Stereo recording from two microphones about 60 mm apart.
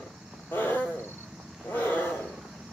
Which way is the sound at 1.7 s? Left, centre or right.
Left.